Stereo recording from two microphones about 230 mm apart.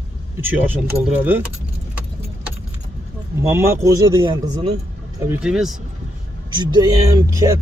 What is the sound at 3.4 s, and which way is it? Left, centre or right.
Speech, centre.